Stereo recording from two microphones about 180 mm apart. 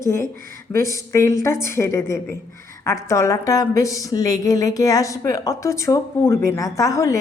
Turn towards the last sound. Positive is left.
turn(degrees=15)  # may be behind; listen again after turning